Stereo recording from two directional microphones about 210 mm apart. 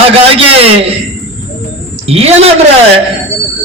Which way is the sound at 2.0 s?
30° right (ahead or behind).